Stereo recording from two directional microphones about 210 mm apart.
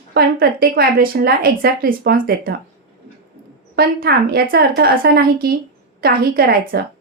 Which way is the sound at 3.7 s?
45° right (ahead or behind).